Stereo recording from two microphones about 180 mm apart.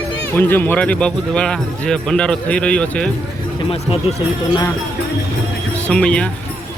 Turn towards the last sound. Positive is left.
turn(degrees=5)  # may be behind; listen again after turning